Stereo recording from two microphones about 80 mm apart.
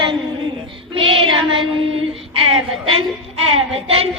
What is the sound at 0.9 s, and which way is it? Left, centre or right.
Child singing, right.